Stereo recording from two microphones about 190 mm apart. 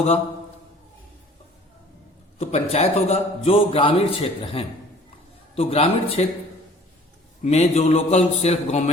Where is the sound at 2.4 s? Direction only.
35° left (ahead or behind).